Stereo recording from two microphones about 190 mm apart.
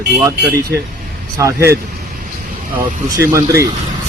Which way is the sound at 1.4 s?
15° right (ahead or behind).